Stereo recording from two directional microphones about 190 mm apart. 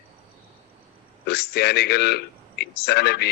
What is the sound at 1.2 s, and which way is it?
A man's voice, 60° left (ahead or behind).